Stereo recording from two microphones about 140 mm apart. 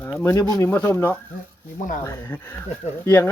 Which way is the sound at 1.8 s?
65° left (ahead or behind).